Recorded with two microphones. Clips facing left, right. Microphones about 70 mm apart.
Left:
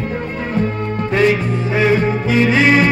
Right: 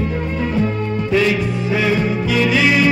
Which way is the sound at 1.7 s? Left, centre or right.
Left.